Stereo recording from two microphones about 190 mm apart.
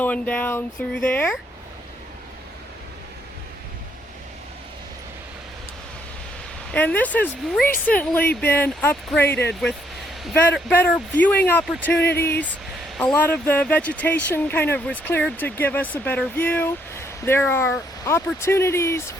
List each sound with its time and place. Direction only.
0.0 s speech: 10° left (ahead or behind)
6.7 s speech: 10° left (ahead or behind)
11.9 s speech: 60° left (ahead or behind)
12.2 s speech: 10° left (ahead or behind)